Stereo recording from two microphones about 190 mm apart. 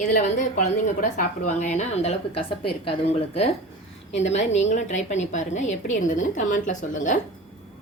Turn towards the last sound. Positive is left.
turn(degrees=40)  # may be behind; listen again after turning